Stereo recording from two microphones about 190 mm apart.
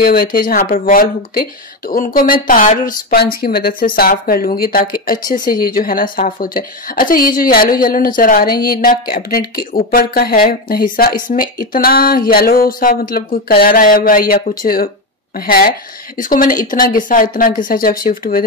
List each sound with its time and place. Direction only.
0.0 s speech: 50° left (ahead or behind)